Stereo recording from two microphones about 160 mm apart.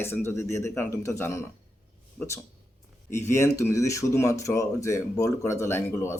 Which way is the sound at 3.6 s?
20° left (ahead or behind).